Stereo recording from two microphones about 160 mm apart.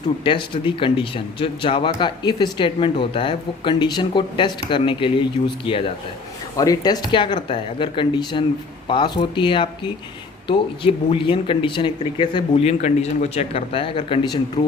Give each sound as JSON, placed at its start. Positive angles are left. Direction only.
{"t": 0.3, "sound": "speech", "side_deg": 30}
{"t": 6.6, "sound": "speech", "side_deg": 25}